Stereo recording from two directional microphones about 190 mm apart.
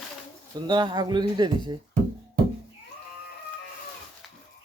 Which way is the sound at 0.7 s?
25° right (ahead or behind).